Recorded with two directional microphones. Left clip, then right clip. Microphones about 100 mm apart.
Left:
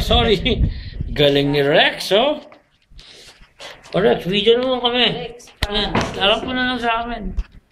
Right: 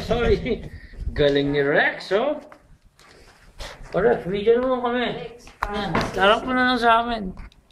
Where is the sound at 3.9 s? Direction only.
Centre (ahead or behind).